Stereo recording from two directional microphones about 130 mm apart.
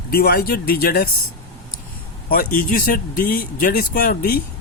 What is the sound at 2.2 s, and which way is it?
Speech, 90° left.